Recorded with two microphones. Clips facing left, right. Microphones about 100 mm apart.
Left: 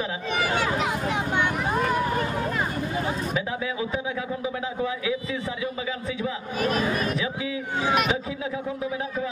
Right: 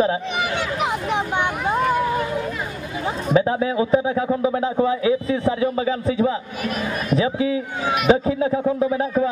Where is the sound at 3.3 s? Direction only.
35° right (ahead or behind).